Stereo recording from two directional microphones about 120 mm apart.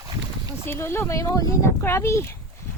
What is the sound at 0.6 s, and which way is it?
A child's voice, 20° left (ahead or behind).